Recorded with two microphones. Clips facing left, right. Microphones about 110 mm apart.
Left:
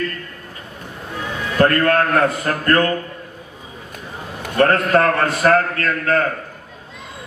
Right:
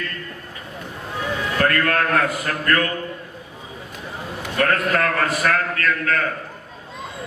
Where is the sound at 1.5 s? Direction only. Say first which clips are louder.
Left 6 dB; 30° left (ahead or behind).